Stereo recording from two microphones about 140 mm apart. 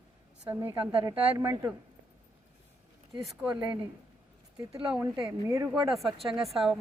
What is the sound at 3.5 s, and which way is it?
Speech, 30° right (ahead or behind).